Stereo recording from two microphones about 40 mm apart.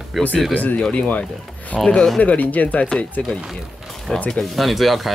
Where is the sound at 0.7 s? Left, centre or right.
Left.